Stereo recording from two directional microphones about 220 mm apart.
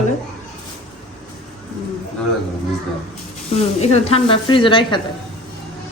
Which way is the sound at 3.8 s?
30° left (ahead or behind).